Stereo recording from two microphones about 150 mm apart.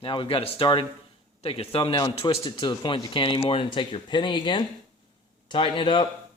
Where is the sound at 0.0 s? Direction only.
35° left (ahead or behind).